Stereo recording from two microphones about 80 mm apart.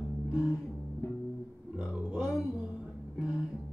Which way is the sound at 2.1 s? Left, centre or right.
Centre.